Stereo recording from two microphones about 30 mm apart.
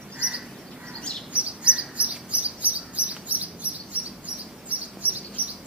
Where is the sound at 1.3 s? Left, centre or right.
Right.